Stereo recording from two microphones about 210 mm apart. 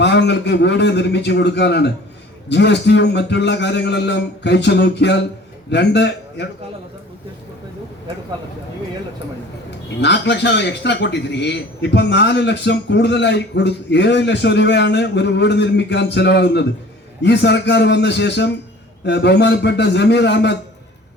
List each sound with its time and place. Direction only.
0.0 s a man's voice: 55° left (ahead or behind)
10.0 s a man's voice: 55° left (ahead or behind)